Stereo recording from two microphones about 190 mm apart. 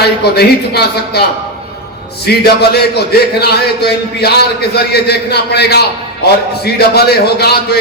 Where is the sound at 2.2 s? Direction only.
60° left (ahead or behind).